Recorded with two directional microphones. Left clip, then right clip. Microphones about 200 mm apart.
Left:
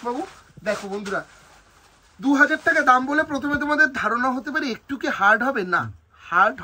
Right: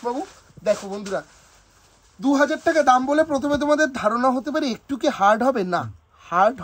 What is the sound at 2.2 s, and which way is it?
Speech, 40° right (ahead or behind).